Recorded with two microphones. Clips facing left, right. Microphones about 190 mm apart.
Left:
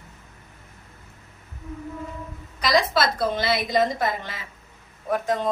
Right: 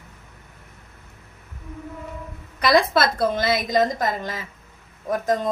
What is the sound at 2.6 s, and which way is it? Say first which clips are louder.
A woman's voice: right 3 dB; 55° right (ahead or behind).